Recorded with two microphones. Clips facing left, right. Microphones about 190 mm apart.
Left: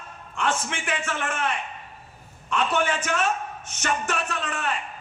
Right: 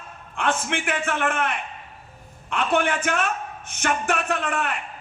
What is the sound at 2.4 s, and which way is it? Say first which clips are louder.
A man's voice: right 2 dB; 55° right (ahead or behind).